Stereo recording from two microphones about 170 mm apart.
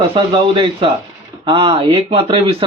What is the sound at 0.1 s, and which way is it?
Speech, 30° right (ahead or behind).